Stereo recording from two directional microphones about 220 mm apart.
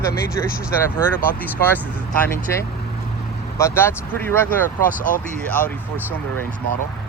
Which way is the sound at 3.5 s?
10° left (ahead or behind).